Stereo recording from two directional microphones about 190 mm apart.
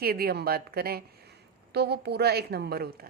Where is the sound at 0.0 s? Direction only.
55° right (ahead or behind).